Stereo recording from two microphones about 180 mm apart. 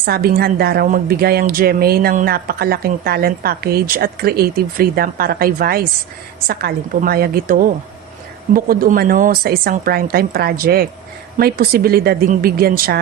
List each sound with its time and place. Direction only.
0.0 s a woman's voice: 55° right (ahead or behind)